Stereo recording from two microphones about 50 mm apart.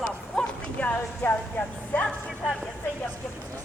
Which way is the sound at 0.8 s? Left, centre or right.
Left.